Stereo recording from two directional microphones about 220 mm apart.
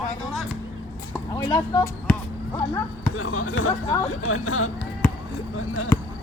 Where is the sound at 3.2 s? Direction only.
75° left (ahead or behind).